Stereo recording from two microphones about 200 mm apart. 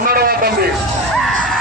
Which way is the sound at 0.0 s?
50° right (ahead or behind).